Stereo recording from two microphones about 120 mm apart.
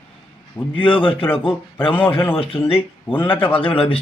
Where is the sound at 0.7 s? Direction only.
45° left (ahead or behind).